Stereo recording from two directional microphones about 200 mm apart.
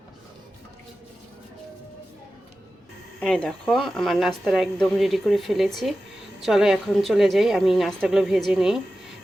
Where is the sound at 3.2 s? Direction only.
5° left (ahead or behind).